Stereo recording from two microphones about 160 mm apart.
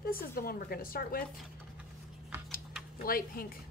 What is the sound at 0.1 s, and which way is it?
A woman's voice, 65° left (ahead or behind).